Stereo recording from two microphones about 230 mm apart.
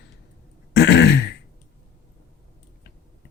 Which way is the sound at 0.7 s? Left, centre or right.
Left.